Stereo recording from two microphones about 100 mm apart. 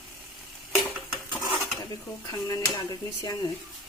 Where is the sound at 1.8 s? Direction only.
35° left (ahead or behind).